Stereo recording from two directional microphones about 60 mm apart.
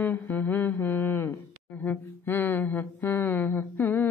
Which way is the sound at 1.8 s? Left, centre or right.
Left.